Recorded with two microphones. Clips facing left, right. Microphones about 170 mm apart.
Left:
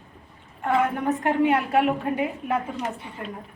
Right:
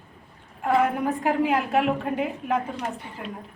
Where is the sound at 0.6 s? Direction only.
5° right (ahead or behind).